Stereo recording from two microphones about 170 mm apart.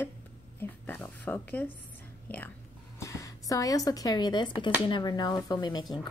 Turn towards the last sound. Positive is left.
turn(degrees=25)  # may be behind; listen again after turning